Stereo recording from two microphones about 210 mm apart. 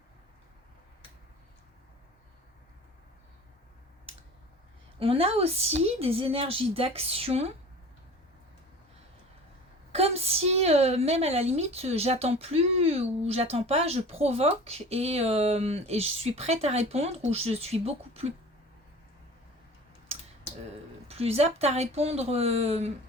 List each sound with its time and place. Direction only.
4.9 s a woman's voice: 25° right (ahead or behind)
9.9 s a woman's voice: 30° right (ahead or behind)
21.1 s a woman's voice: 30° right (ahead or behind)